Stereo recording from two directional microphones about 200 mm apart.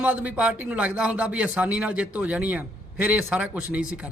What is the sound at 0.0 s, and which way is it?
A man's voice, 5° right (ahead or behind).